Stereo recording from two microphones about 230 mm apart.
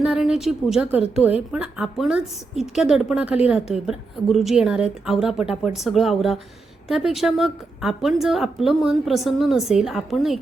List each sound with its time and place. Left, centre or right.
0.0 s a woman's voice: centre